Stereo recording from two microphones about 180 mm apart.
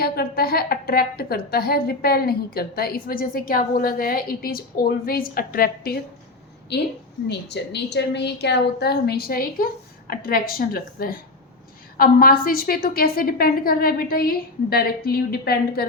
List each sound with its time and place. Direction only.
0.0 s a woman's voice: 60° left (ahead or behind)
6.7 s a woman's voice: 70° left (ahead or behind)